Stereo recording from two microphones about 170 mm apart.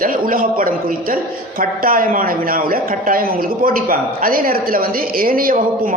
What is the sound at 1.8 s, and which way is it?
A woman's voice, 55° right (ahead or behind).